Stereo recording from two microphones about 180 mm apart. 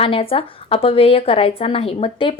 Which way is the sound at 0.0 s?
30° left (ahead or behind).